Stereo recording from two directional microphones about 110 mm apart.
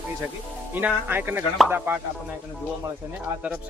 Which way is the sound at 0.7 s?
20° right (ahead or behind).